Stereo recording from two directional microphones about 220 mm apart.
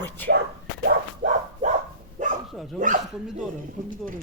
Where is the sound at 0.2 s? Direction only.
10° left (ahead or behind).